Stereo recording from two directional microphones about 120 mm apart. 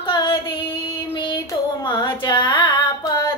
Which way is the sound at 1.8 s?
40° left (ahead or behind).